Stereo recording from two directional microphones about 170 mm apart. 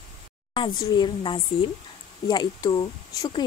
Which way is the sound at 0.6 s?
25° left (ahead or behind).